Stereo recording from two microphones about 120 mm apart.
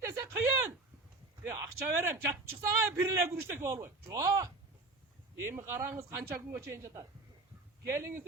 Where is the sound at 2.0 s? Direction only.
20° right (ahead or behind).